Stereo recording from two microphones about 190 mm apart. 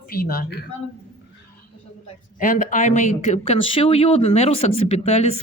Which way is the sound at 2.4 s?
45° left (ahead or behind).